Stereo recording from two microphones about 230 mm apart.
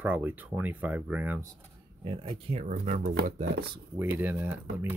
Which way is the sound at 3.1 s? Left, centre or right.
Right.